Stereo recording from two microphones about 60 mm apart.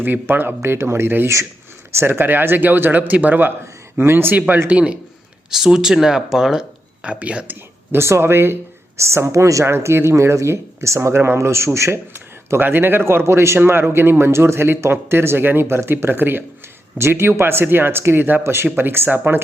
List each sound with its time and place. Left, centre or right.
0.0 s speech: right
3.9 s speech: right
4.4 s speech: right; by 6.7 s centre
7.0 s speech: right
7.9 s speech: right
9.0 s speech: right
9.6 s speech: right
12.1 s speech: right